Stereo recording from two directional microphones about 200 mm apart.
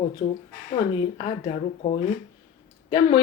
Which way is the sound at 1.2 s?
30° left (ahead or behind).